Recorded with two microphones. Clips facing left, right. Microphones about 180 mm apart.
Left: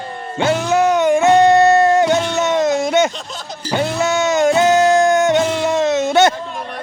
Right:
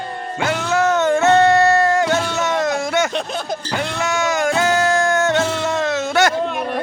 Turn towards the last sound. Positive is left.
turn(degrees=20)  # may be behind; listen again after turning